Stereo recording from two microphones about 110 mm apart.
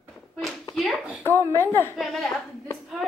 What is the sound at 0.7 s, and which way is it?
Hands, centre (ahead or behind).